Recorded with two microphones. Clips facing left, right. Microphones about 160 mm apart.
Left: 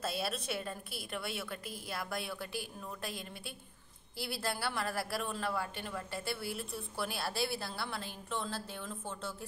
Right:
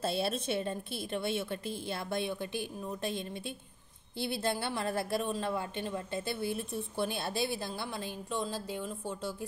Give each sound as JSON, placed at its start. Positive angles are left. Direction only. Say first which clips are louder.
{"t": 0.0, "sound": "a woman's voice", "louder": "right 5 dB", "side_deg": -30}
{"t": 4.2, "sound": "a woman's voice", "louder": "right 4 dB", "side_deg": -20}